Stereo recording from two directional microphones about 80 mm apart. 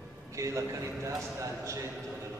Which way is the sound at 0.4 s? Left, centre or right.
Right.